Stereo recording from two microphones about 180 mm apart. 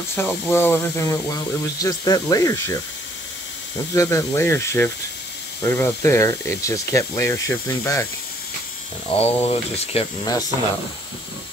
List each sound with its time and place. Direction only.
0.1 s speech: 10° left (ahead or behind)
3.9 s speech: 15° left (ahead or behind)
9.1 s speech: 35° left (ahead or behind)